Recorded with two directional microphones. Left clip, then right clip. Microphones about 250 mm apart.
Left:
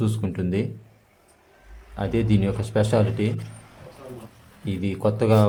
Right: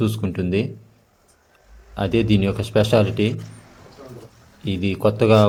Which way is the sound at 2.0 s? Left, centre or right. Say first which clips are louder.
Right 5 dB; centre.